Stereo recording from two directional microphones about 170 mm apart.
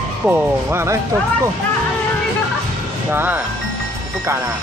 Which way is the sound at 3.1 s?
10° right (ahead or behind).